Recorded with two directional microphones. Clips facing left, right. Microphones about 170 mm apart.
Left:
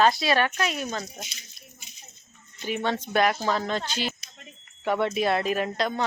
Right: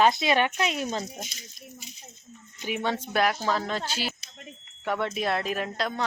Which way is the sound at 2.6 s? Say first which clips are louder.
Left 1 dB; 10° right (ahead or behind).